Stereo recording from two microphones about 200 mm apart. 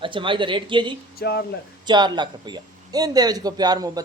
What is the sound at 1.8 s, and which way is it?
A man's voice, 20° right (ahead or behind).